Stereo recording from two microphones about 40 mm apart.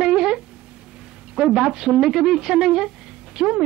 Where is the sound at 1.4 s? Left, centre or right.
Right.